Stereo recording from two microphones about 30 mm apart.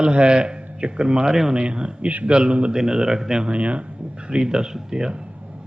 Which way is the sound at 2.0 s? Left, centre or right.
Right.